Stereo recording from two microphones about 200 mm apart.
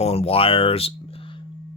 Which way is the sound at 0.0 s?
30° left (ahead or behind).